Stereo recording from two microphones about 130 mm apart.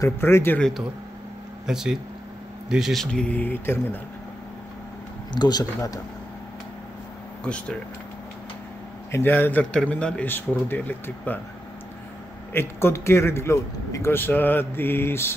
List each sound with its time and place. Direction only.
0.0 s a man's voice: 20° left (ahead or behind)
0.6 s a man's voice: 5° left (ahead or behind)
5.3 s speech: 30° left (ahead or behind)
7.4 s a man's voice: 10° left (ahead or behind)
9.1 s a man's voice: 15° left (ahead or behind)
12.5 s a man's voice: 20° left (ahead or behind)